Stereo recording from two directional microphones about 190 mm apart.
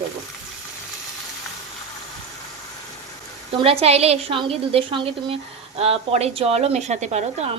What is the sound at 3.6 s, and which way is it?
A woman's voice, 30° right (ahead or behind).